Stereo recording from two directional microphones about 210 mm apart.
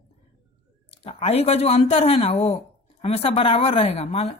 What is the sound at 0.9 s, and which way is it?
A woman's voice, 25° left (ahead or behind).